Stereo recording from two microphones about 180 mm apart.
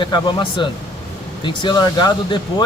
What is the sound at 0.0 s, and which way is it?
Speech, 25° left (ahead or behind).